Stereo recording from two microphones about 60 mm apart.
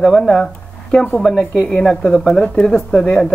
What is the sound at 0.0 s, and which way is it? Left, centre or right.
Speech, centre.